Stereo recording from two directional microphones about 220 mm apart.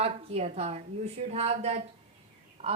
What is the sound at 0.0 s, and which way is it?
A woman's voice, 25° right (ahead or behind).